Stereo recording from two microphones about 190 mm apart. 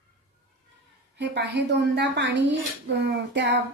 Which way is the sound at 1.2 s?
60° right (ahead or behind).